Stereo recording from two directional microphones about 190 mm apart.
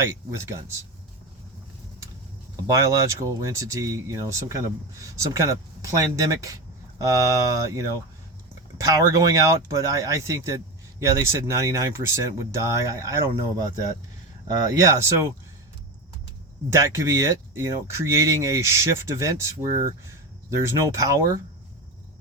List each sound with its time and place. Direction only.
0.0 s speech: 15° right (ahead or behind)
2.6 s speech: 15° right (ahead or behind)
14.8 s speech: 15° right (ahead or behind)
16.6 s speech: 15° right (ahead or behind)